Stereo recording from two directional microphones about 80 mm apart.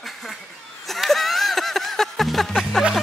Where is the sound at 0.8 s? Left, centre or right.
Centre.